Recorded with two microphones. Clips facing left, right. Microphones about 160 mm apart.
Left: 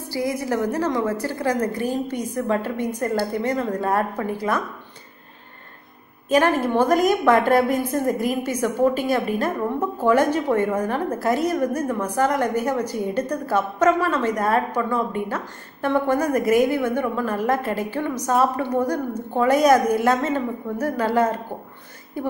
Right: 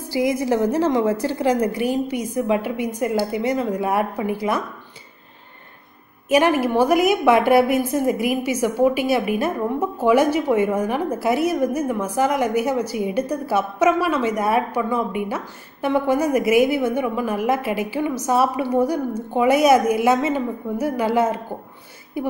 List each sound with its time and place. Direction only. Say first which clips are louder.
0.3 s a woman's voice: right 3 dB; 20° right (ahead or behind)
6.3 s a woman's voice: right 1 dB; 10° right (ahead or behind)